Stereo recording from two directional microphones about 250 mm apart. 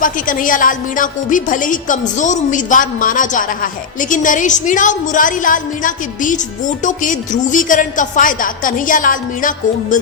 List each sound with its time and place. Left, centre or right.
0.0 s a woman's voice: left